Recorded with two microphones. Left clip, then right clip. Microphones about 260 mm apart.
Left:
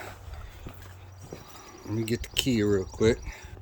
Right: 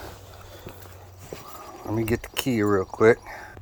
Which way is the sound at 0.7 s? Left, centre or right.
Right.